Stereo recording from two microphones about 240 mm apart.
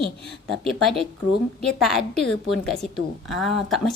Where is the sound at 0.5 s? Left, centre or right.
Centre.